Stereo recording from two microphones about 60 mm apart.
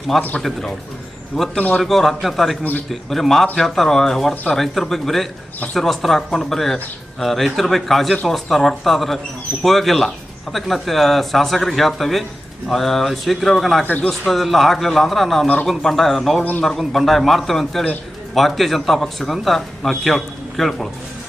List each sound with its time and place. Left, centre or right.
0.3 s speech: centre
13.8 s a man's voice: left
14.1 s speech: centre
16.4 s a man's voice: left
16.6 s speech: centre